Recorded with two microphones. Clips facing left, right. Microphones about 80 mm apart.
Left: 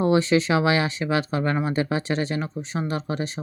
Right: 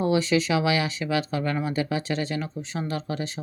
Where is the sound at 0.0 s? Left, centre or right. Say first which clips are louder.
Left 3 dB; left.